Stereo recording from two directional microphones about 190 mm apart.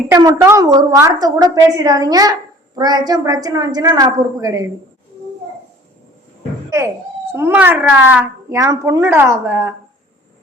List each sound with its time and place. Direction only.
0.1 s a woman's voice: 20° right (ahead or behind)
6.7 s a woman's voice: 15° right (ahead or behind)